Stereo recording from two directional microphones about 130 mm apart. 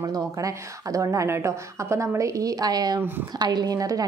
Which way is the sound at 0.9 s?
25° right (ahead or behind).